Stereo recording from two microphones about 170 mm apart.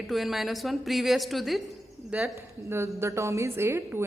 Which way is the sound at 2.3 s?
15° right (ahead or behind).